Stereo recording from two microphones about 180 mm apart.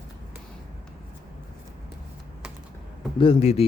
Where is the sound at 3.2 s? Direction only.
30° left (ahead or behind).